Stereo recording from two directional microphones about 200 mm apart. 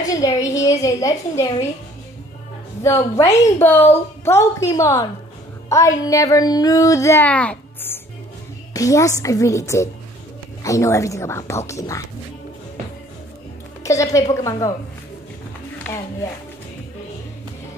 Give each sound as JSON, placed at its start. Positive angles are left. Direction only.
{"t": 0.0, "sound": "speech", "side_deg": 20}
{"t": 2.8, "sound": "a woman's voice", "side_deg": 15}
{"t": 13.8, "sound": "speech", "side_deg": 15}